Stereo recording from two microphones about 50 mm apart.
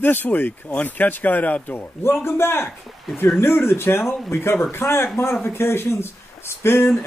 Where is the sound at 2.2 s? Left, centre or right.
Left.